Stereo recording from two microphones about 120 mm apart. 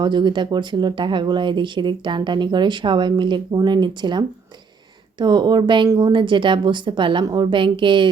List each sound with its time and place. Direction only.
0.0 s speech: 40° right (ahead or behind)